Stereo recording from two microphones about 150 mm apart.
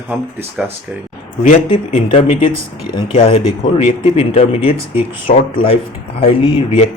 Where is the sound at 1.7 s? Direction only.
35° left (ahead or behind).